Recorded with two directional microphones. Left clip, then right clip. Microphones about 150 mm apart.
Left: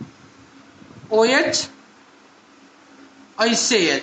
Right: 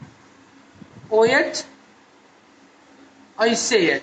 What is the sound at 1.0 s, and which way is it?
Speech, 40° left (ahead or behind).